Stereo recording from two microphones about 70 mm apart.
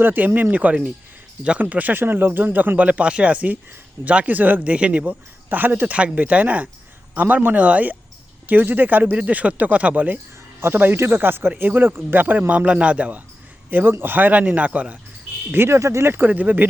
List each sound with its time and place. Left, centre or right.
0.0 s speech: right
15.5 s speech: right